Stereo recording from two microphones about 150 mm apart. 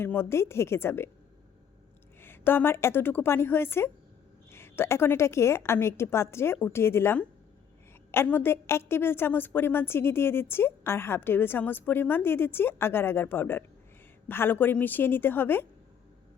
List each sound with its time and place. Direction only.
0.0 s a woman's voice: 15° left (ahead or behind)
2.2 s a woman's voice: 15° left (ahead or behind)